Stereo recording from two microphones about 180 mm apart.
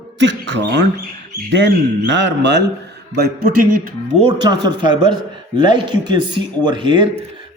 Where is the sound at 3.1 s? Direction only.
60° right (ahead or behind).